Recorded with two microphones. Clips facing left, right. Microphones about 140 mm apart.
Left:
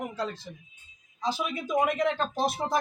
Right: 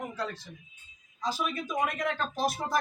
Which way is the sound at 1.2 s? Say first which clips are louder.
Left 2 dB; 25° left (ahead or behind).